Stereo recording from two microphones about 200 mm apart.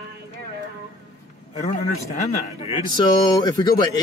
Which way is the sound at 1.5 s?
35° left (ahead or behind).